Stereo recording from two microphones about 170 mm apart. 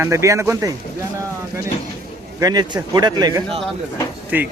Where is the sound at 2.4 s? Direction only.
25° right (ahead or behind).